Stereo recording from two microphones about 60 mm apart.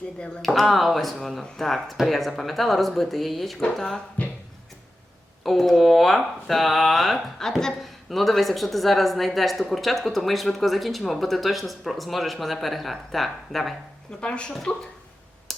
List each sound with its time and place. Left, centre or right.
0.4 s a woman's voice: centre
5.4 s a woman's voice: centre
14.2 s speech: centre
15.5 s a sound: centre